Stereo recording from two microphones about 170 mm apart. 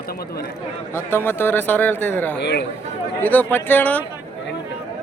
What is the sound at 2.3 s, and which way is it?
Speech, 80° left.